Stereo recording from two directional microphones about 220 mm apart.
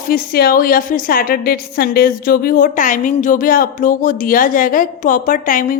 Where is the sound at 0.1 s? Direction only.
40° left (ahead or behind).